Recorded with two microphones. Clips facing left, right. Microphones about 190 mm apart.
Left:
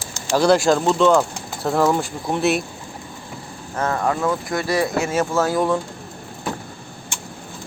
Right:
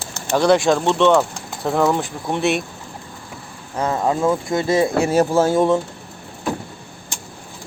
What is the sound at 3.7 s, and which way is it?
Speech, 15° right (ahead or behind).